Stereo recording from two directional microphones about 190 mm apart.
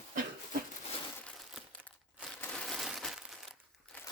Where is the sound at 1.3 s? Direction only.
Centre (ahead or behind).